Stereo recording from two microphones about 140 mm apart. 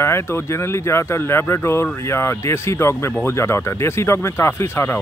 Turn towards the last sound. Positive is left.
turn(degrees=15)  # may be behind; listen again after turning